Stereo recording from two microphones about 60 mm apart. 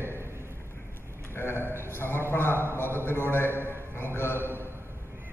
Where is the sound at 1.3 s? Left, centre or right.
Left.